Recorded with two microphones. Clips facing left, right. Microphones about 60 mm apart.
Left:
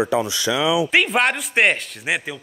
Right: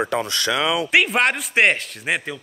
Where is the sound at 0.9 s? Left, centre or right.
Centre.